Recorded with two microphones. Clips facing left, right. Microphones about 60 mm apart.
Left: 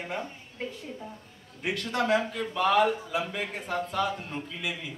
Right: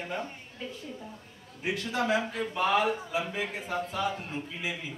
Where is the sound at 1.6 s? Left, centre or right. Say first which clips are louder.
Left 1 dB; left.